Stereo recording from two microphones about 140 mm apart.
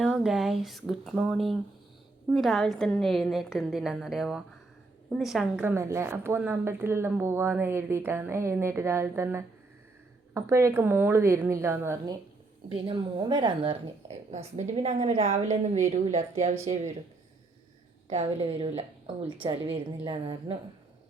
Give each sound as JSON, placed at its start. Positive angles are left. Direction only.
{"t": 0.0, "sound": "a woman's voice", "side_deg": 0}
{"t": 5.6, "sound": "speech", "side_deg": -20}
{"t": 12.6, "sound": "a woman's voice", "side_deg": -35}
{"t": 18.1, "sound": "a woman's voice", "side_deg": -50}